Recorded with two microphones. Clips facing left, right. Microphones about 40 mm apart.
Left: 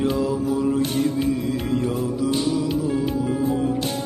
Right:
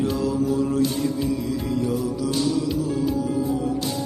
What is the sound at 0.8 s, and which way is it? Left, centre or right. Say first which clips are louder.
Music: left 1 dB; left.